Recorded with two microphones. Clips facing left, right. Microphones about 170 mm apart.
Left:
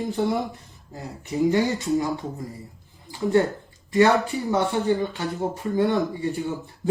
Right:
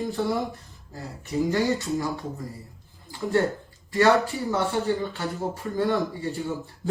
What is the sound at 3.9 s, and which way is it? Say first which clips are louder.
Speech: left 1 dB; 20° left (ahead or behind).